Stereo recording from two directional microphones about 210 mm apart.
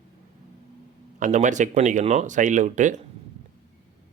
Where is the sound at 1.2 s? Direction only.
35° right (ahead or behind).